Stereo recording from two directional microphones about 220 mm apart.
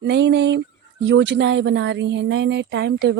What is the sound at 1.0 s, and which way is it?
Speech, 55° right (ahead or behind).